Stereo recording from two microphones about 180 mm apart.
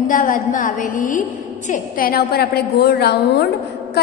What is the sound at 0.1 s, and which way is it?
A woman's voice, 45° left (ahead or behind).